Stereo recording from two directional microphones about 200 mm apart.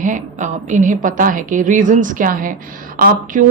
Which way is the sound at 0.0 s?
40° right (ahead or behind).